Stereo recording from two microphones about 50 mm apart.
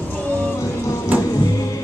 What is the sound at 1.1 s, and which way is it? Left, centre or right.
Music, right.